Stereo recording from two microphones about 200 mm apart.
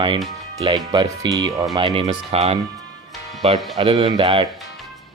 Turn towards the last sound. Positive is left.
turn(degrees=-25)  # may be behind; listen again after turning